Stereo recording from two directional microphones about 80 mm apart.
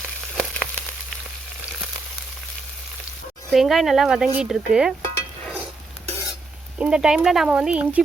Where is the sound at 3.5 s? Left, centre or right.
Centre.